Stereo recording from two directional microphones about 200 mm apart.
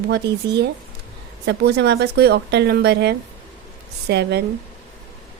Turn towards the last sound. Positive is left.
turn(degrees=-55)  # may be behind; listen again after turning